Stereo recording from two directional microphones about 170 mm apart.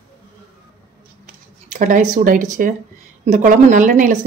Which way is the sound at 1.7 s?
50° right (ahead or behind).